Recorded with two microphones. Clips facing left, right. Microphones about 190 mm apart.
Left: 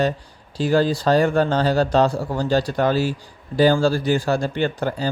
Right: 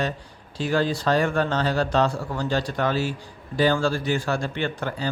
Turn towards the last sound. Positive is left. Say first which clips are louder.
# left 5 dB
turn(degrees=35)  # may be behind; listen again after turning